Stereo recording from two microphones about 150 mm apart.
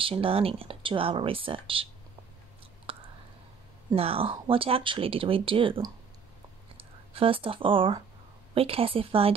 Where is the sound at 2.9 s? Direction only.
40° right (ahead or behind).